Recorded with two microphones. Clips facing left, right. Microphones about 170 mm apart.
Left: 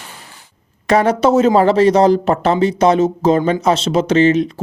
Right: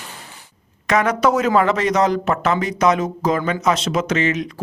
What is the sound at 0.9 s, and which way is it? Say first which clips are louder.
Speech: left 4 dB; 30° left (ahead or behind).